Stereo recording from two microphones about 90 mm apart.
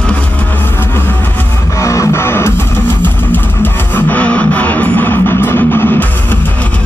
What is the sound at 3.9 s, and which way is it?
Music, 15° left (ahead or behind).